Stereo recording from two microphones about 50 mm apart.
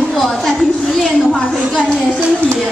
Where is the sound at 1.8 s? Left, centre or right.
Centre.